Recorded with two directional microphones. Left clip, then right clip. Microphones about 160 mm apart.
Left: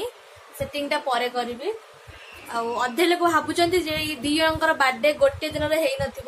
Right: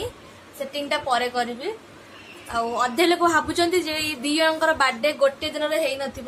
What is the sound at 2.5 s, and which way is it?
A woman's voice, 5° right (ahead or behind).